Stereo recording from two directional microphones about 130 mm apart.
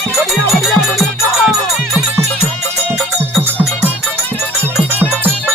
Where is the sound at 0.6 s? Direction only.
Centre (ahead or behind).